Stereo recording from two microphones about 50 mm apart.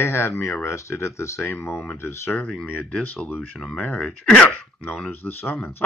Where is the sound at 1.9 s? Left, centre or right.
Left.